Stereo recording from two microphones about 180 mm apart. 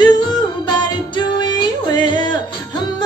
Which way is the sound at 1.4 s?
25° left (ahead or behind).